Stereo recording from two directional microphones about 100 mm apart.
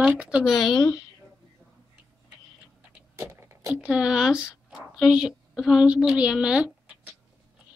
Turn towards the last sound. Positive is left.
turn(degrees=-10)  # may be behind; listen again after turning